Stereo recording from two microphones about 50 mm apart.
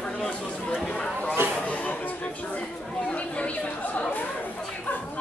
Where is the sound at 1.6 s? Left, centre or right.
Left.